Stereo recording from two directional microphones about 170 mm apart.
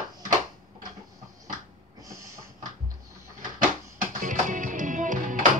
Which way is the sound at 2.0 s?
20° right (ahead or behind).